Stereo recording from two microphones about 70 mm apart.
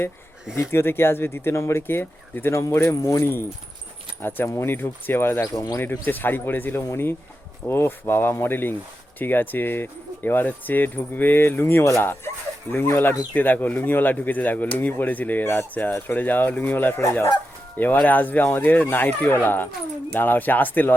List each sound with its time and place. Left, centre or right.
0.7 s speech: left
2.9 s speech: left
3.2 s speech: left
4.4 s speech: left
4.7 s speech: left
5.4 s speech: left
5.8 s speech: left
12.7 s speech: left
17.0 s speech: left
17.7 s speech: left